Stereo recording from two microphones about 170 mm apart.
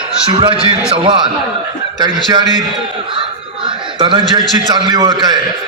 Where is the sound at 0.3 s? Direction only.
30° right (ahead or behind).